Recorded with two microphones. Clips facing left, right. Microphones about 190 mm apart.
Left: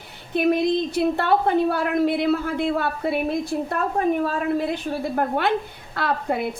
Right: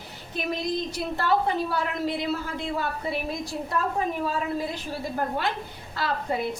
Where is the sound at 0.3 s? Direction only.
60° left (ahead or behind).